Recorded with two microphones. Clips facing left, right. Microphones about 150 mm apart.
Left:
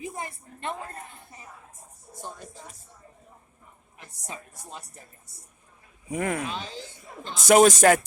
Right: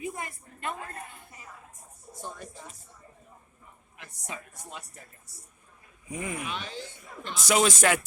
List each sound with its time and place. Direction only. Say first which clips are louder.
0.0 s a sound: even; 30° left (ahead or behind)
6.1 s speech: left 7 dB; 65° left (ahead or behind)
6.4 s speech: left 3 dB; 30° left (ahead or behind)
7.4 s speech: left 8 dB; 50° left (ahead or behind)